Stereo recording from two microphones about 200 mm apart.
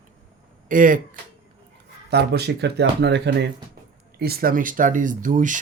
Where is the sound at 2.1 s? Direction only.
55° right (ahead or behind).